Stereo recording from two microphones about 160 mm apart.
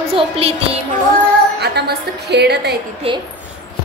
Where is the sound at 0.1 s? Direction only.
40° right (ahead or behind).